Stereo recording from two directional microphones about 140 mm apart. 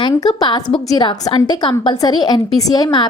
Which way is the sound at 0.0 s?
30° left (ahead or behind).